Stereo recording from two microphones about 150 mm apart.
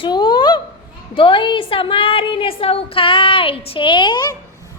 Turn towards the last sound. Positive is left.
turn(degrees=30)  # may be behind; listen again after turning